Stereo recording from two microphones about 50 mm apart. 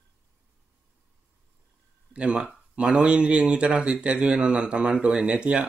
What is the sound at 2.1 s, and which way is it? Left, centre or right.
Speech, right.